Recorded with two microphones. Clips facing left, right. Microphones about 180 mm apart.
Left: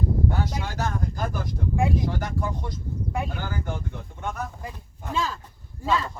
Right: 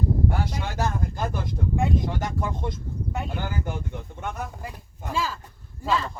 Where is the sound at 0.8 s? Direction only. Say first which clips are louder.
Right 2 dB; 25° right (ahead or behind).